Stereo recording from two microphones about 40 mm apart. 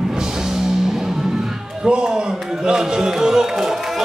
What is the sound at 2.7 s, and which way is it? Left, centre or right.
Music, centre.